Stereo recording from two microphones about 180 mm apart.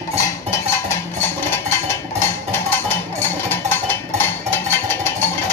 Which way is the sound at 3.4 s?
10° left (ahead or behind).